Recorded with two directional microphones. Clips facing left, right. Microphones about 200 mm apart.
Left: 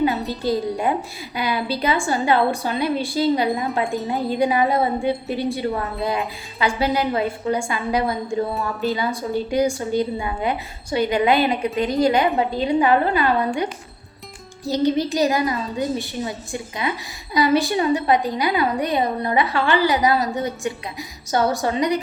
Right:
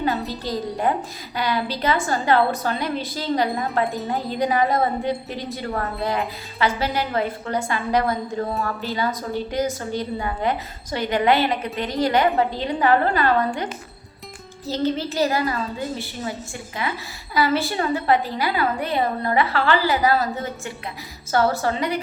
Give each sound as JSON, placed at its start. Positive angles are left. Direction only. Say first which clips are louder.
{"t": 1.4, "sound": "a woman's voice", "louder": "left 1 dB", "side_deg": 10}